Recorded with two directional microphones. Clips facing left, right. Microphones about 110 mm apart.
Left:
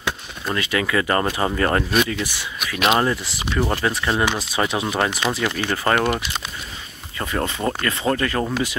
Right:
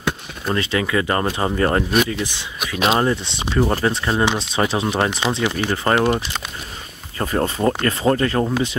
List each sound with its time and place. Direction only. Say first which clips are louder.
0.5 s speech: right 2 dB; 25° right (ahead or behind)
2.6 s speech: right 1 dB; 30° right (ahead or behind)
7.2 s speech: right 4 dB; 35° right (ahead or behind)